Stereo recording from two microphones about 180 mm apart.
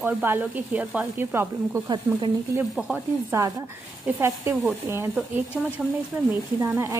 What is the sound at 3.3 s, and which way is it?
A woman's voice, 15° right (ahead or behind).